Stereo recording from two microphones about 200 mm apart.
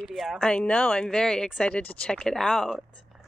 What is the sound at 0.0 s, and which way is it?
Speech, centre (ahead or behind).